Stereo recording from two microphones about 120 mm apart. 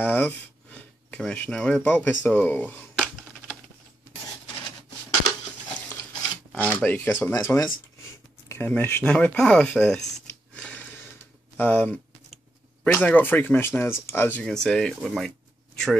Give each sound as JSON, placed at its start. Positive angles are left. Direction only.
{"t": 0.0, "sound": "speech", "side_deg": 15}
{"t": 0.7, "sound": "a sound", "side_deg": 10}
{"t": 6.5, "sound": "speech", "side_deg": 10}
{"t": 10.5, "sound": "a sound", "side_deg": 10}
{"t": 11.5, "sound": "speech", "side_deg": 15}
{"t": 14.4, "sound": "speech", "side_deg": 5}